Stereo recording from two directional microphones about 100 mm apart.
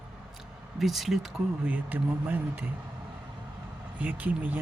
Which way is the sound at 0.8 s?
Centre (ahead or behind).